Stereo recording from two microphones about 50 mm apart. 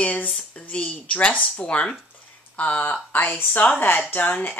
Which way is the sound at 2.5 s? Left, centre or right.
Left.